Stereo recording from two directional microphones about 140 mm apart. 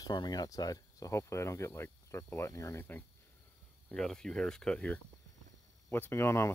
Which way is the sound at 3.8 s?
5° left (ahead or behind).